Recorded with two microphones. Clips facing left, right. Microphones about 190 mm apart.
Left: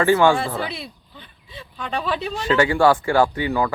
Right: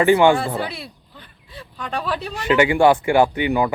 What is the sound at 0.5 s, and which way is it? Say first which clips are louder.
Speech: right 1 dB; 5° right (ahead or behind).